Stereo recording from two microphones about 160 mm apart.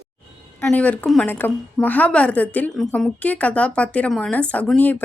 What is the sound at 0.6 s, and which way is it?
A woman's voice, 10° left (ahead or behind).